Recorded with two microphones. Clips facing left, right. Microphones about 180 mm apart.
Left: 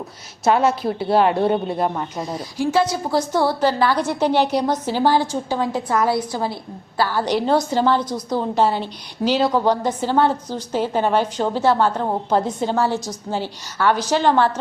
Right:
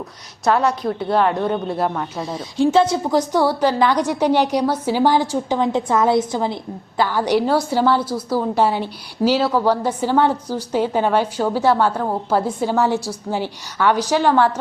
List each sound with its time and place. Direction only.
0.4 s a woman's voice: 5° left (ahead or behind)
1.0 s speech: 25° left (ahead or behind)
1.6 s a woman's voice: centre (ahead or behind)
2.6 s a woman's voice: 25° right (ahead or behind)